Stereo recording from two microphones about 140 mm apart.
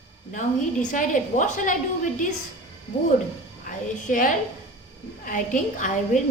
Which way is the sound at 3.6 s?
70° left (ahead or behind).